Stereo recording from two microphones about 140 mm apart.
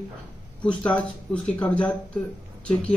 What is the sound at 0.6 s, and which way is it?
Speech, 10° left (ahead or behind).